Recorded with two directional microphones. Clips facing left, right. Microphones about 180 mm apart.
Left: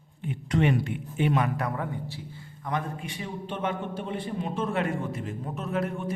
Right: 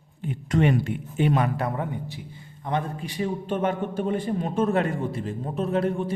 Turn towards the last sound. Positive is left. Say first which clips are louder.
# right 5 dB
turn(degrees=-30)  # may be behind; listen again after turning